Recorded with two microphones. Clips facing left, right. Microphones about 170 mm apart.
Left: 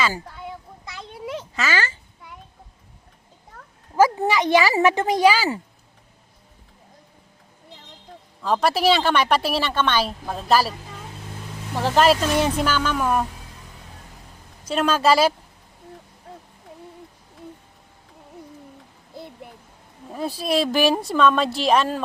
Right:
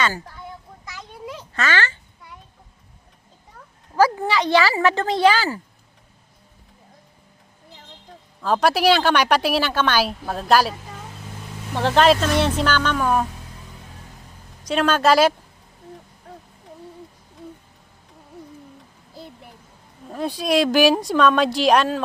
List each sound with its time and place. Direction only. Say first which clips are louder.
1.5 s babbling: right 3 dB; 10° left (ahead or behind)
3.9 s a woman's voice: left 1 dB; 20° left (ahead or behind)
8.4 s a woman's voice: right 2 dB; centre (ahead or behind)
14.7 s a woman's voice: right 1 dB; centre (ahead or behind)
20.1 s a woman's voice: right 2 dB; 5° left (ahead or behind)